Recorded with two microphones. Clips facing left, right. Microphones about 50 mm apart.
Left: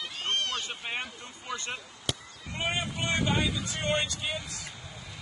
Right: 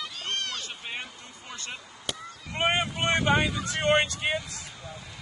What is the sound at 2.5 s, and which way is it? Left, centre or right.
Speech, right.